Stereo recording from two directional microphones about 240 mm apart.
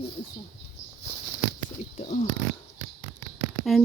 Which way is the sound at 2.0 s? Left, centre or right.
Left.